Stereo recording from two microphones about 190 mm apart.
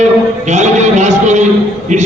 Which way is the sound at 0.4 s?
40° right (ahead or behind).